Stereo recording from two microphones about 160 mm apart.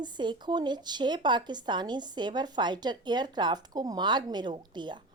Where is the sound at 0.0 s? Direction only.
30° right (ahead or behind).